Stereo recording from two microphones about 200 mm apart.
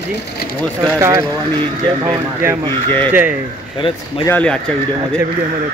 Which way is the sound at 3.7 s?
25° left (ahead or behind).